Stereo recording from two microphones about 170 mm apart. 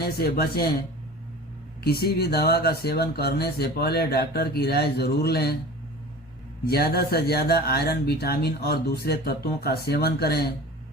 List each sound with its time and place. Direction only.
0.0 s speech: 70° left (ahead or behind)
1.8 s speech: 65° left (ahead or behind)
6.7 s speech: 65° left (ahead or behind)